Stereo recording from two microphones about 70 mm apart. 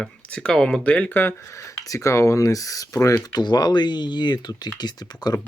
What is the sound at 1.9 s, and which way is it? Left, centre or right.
Speech, left.